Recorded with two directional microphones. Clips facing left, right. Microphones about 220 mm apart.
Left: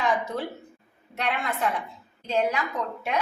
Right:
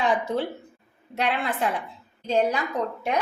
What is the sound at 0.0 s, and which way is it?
A woman's voice, 30° right (ahead or behind).